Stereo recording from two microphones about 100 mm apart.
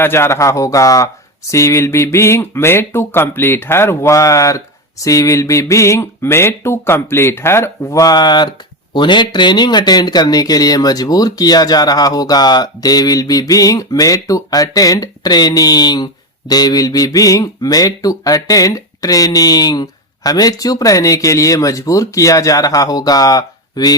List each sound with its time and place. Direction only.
0.0 s speech: 25° left (ahead or behind)